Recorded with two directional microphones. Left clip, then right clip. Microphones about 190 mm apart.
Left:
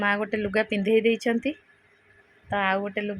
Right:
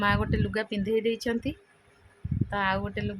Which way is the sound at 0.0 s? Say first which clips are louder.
Left 2 dB; 5° left (ahead or behind).